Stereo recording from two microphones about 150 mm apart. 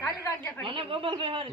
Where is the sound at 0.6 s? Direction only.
35° right (ahead or behind).